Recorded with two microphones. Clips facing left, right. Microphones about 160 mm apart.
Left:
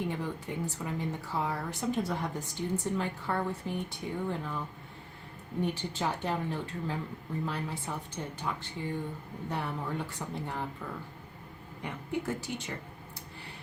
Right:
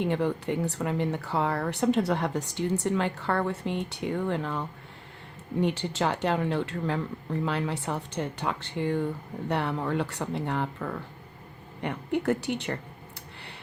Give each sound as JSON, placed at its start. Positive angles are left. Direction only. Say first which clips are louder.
{"t": 0.0, "sound": "a woman's voice", "louder": "right 8 dB", "side_deg": -70}